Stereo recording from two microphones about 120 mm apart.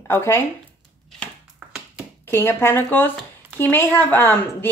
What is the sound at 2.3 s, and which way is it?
Speech, 20° left (ahead or behind).